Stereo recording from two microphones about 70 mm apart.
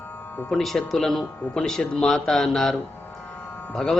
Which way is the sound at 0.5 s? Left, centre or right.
Centre.